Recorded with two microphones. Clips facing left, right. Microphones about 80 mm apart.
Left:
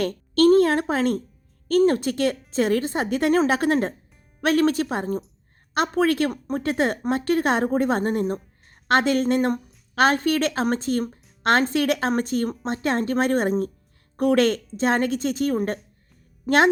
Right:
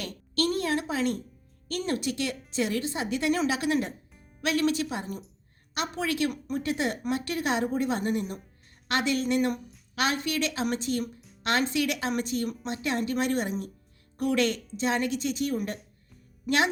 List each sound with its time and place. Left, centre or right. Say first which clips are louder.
0.0 s a child's voice: left 11 dB; left